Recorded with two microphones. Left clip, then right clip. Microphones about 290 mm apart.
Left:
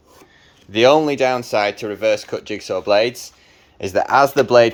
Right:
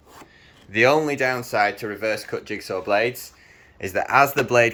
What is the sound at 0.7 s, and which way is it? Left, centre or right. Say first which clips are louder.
Speech: left 5 dB; left.